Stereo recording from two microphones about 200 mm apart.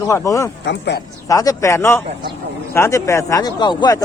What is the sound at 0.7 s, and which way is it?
Speech, 55° left (ahead or behind).